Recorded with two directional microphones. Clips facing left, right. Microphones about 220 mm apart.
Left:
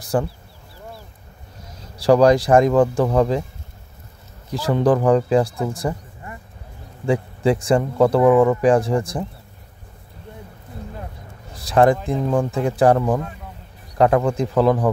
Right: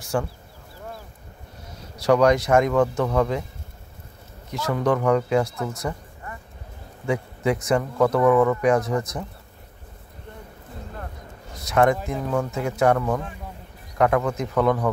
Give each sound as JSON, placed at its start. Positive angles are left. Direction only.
{"t": 0.0, "sound": "speech", "side_deg": 35}
{"t": 2.0, "sound": "speech", "side_deg": 30}
{"t": 4.5, "sound": "speech", "side_deg": 30}
{"t": 7.1, "sound": "speech", "side_deg": 30}
{"t": 11.5, "sound": "speech", "side_deg": 30}